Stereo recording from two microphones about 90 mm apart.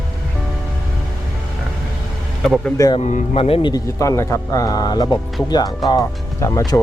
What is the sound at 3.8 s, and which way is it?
Speech, 35° left (ahead or behind).